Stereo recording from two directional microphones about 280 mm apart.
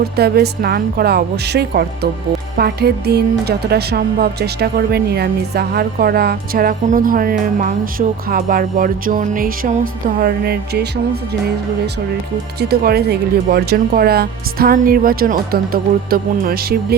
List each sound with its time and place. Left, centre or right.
0.0 s speech: right
12.5 s speech: right